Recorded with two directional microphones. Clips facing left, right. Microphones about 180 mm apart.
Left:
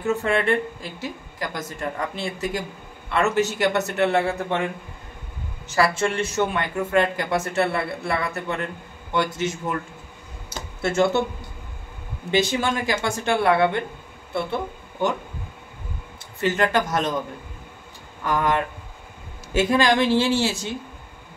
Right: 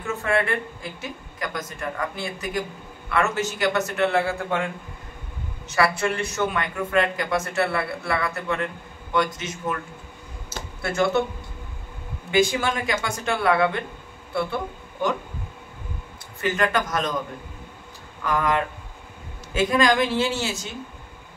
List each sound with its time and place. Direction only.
0.0 s speech: 25° left (ahead or behind)
5.7 s speech: 25° left (ahead or behind)
10.8 s speech: 25° left (ahead or behind)
12.3 s a man's voice: 25° left (ahead or behind)
16.3 s speech: 25° left (ahead or behind)
18.2 s speech: 25° left (ahead or behind)